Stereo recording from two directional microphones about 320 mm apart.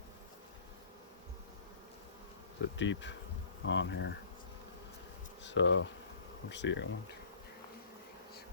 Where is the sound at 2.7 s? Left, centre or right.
Left.